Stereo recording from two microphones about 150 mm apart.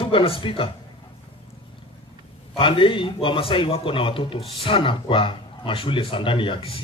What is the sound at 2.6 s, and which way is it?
A man's voice, 40° left (ahead or behind).